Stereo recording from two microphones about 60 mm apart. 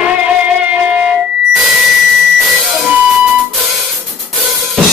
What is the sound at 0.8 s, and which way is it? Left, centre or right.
Music, right.